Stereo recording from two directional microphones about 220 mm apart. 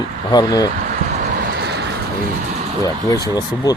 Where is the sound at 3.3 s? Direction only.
15° left (ahead or behind).